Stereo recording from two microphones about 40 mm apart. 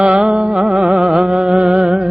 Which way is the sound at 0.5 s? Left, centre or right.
Centre.